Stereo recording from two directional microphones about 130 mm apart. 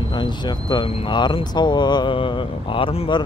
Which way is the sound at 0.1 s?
35° left (ahead or behind).